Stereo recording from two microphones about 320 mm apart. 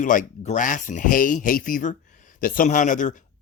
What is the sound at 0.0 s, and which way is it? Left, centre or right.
Speech, left.